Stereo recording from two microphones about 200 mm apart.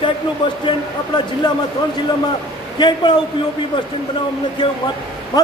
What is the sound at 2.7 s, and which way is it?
Speech, 20° left (ahead or behind).